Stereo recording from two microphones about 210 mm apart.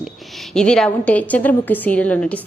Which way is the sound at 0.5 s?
5° left (ahead or behind).